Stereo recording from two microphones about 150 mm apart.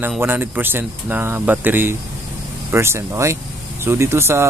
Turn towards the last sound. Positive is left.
turn(degrees=-15)  # may be behind; listen again after turning